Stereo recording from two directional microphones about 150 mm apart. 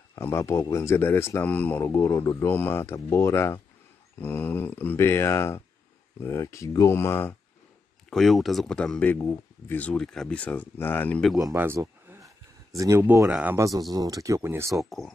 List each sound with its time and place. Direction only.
0.1 s a man's voice: 15° left (ahead or behind)
8.1 s a man's voice: centre (ahead or behind)
11.3 s speech: 15° right (ahead or behind)